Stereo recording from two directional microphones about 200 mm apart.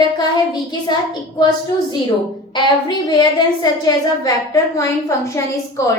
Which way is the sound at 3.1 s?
20° left (ahead or behind).